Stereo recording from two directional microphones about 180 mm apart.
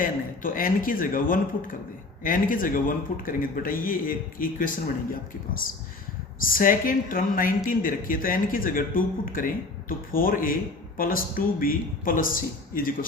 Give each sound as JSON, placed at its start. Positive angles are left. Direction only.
{"t": 0.0, "sound": "speech", "side_deg": 50}
{"t": 6.4, "sound": "speech", "side_deg": 50}